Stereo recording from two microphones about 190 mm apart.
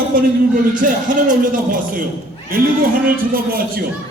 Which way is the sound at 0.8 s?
50° right (ahead or behind).